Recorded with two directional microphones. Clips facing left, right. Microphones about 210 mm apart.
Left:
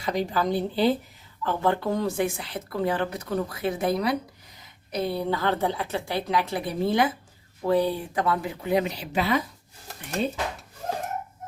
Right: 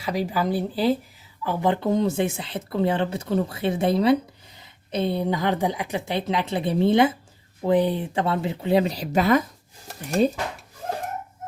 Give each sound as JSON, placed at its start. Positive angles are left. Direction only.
{"t": 0.0, "sound": "speech", "side_deg": -5}
{"t": 1.5, "sound": "speech", "side_deg": -15}